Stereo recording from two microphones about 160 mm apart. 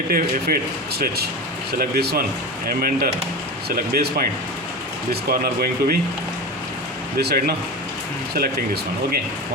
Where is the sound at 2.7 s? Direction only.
65° right (ahead or behind).